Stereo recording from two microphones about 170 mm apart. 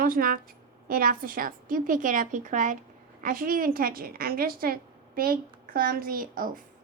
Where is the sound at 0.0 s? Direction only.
55° right (ahead or behind).